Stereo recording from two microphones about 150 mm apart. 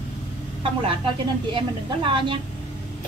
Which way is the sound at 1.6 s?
35° right (ahead or behind).